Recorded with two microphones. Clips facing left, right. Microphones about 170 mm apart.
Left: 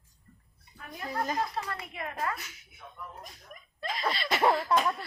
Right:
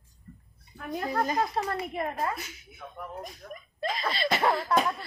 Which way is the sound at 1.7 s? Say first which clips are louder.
Right 7 dB; 40° right (ahead or behind).